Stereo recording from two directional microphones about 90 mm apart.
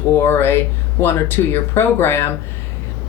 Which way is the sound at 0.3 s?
25° left (ahead or behind).